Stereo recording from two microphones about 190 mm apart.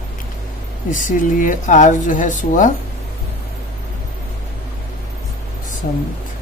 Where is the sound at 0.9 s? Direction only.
45° left (ahead or behind).